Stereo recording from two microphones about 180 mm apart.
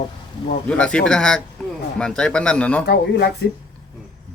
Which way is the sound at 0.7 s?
5° left (ahead or behind).